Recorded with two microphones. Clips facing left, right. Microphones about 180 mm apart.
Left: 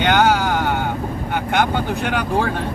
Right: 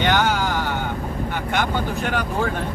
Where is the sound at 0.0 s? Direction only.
65° left (ahead or behind).